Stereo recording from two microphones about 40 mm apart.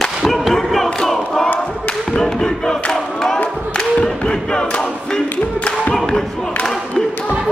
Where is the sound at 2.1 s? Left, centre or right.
Centre.